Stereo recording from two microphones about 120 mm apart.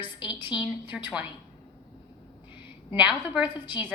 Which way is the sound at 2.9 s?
15° right (ahead or behind).